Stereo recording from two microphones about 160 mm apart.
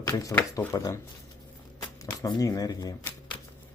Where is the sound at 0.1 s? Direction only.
20° left (ahead or behind).